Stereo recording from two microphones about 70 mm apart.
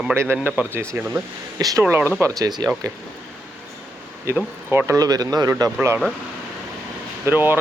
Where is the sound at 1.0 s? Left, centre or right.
Centre.